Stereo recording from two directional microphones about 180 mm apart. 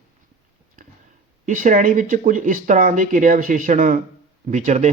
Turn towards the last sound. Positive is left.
turn(degrees=-45)  # may be behind; listen again after turning